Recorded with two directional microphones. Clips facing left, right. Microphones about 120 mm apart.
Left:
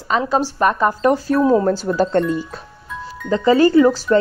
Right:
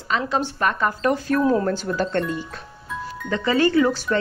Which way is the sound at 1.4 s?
20° left (ahead or behind).